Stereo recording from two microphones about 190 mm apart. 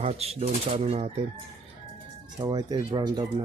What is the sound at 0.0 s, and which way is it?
Speech, 35° right (ahead or behind).